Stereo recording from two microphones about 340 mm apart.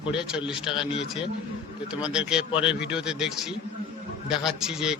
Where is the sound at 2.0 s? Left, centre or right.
Centre.